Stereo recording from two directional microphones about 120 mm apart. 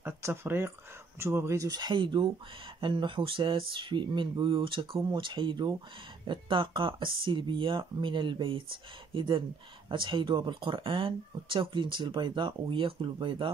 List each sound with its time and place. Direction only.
0.0 s speech: 20° right (ahead or behind); by 13.5 s 45° right (ahead or behind)